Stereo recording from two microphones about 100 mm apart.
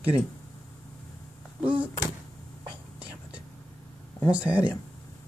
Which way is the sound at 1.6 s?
15° right (ahead or behind).